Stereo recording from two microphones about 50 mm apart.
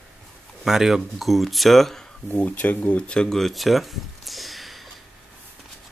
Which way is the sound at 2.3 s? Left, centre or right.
Left.